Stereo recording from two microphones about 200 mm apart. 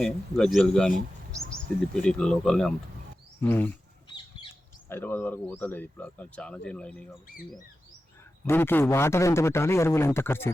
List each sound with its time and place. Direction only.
0.0 s a man's voice: 5° left (ahead or behind)
4.9 s a man's voice: 10° left (ahead or behind)
8.4 s a man's voice: 10° left (ahead or behind)